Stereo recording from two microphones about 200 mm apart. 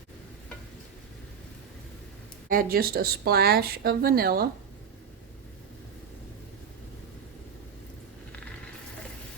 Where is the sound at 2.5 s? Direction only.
45° right (ahead or behind).